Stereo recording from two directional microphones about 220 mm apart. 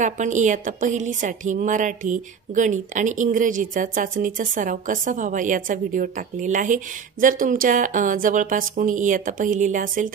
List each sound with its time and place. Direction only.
0.0 s speech: 35° right (ahead or behind)